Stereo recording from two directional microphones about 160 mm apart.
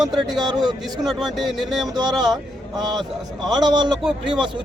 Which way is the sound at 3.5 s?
25° right (ahead or behind).